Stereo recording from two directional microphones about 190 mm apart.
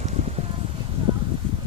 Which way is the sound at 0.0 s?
35° right (ahead or behind).